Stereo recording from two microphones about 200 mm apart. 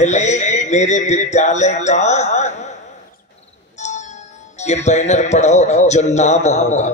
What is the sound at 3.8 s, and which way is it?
Speech, 35° left (ahead or behind).